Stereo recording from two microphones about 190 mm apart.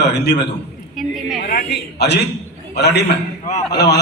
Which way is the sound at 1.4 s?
60° left (ahead or behind).